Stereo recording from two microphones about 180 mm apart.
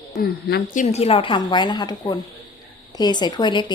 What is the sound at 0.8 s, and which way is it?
A woman's voice, 35° left (ahead or behind).